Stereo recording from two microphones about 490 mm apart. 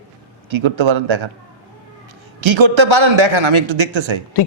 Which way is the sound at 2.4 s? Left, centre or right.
Right.